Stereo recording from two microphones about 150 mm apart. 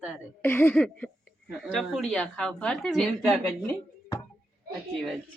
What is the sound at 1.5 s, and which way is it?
A woman's voice, 5° right (ahead or behind).